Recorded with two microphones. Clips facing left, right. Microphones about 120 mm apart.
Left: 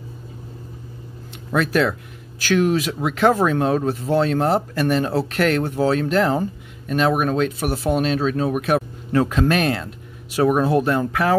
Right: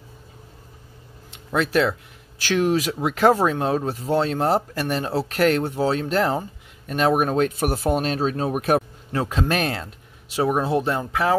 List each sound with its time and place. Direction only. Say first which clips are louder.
1.5 s speech: left 1 dB; 30° right (ahead or behind)
9.1 s speech: left 5 dB; 25° right (ahead or behind)
10.3 s speech: left 4 dB; 20° right (ahead or behind)